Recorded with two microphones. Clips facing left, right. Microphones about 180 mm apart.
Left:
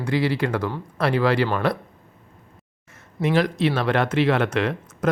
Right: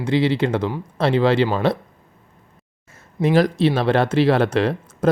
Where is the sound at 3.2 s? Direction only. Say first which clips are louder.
Right 4 dB; 35° right (ahead or behind).